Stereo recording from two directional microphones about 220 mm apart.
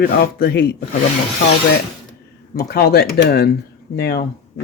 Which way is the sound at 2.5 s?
45° left (ahead or behind).